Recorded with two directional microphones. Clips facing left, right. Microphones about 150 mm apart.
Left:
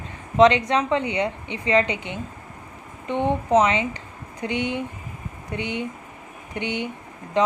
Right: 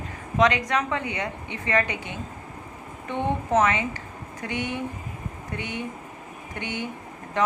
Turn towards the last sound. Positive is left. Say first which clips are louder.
# left 3 dB
turn(degrees=20)  # may be behind; listen again after turning